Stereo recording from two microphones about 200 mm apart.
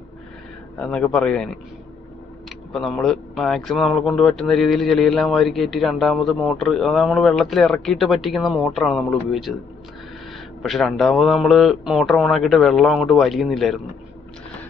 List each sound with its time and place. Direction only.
0.7 s speech: 5° left (ahead or behind)
2.7 s speech: centre (ahead or behind)
10.6 s speech: centre (ahead or behind)